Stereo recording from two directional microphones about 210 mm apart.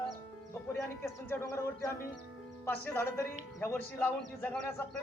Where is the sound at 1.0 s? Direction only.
15° left (ahead or behind).